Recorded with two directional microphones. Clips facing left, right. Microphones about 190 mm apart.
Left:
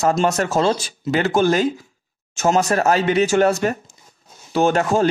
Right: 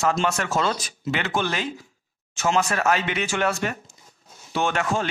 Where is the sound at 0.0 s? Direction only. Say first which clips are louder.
Left 5 dB; 40° left (ahead or behind).